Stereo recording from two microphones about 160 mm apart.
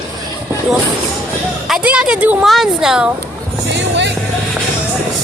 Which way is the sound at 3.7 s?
90° right.